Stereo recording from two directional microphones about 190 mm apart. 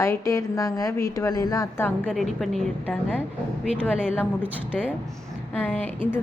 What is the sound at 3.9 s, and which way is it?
A woman's voice, 5° right (ahead or behind).